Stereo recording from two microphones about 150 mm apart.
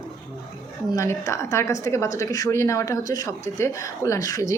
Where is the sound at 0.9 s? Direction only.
20° left (ahead or behind).